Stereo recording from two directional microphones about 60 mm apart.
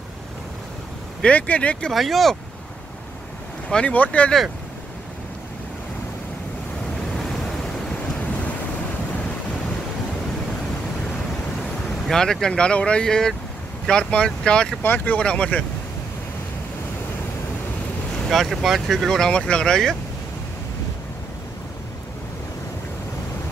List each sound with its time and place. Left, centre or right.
1.2 s speech: left
1.9 s speech: centre
3.6 s speech: left
7.2 s waves: centre
12.1 s speech: centre
14.8 s speech: left
15.1 s speech: centre
18.3 s speech: centre